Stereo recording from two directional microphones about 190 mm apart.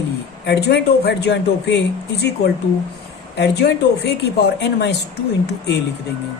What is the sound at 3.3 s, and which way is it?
A man's voice, 60° left (ahead or behind).